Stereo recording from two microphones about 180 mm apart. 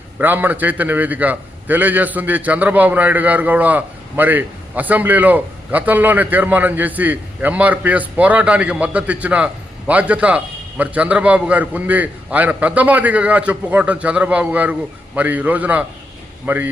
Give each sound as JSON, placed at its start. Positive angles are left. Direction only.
{"t": 0.2, "sound": "a man's voice", "side_deg": -10}